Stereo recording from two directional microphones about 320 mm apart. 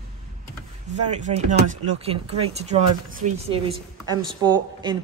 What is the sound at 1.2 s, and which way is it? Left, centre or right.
A woman's voice, right.